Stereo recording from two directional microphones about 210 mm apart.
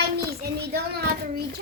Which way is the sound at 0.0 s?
50° right (ahead or behind).